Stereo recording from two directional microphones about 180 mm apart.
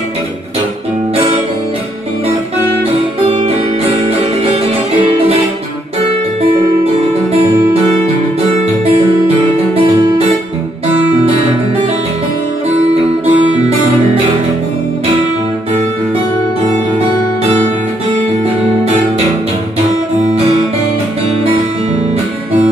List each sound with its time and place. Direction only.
3.4 s music: 35° right (ahead or behind)
13.2 s music: 35° right (ahead or behind)